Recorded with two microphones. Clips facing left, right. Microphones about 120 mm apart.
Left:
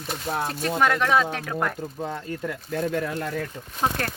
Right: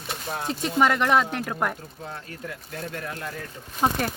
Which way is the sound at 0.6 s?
10° right (ahead or behind).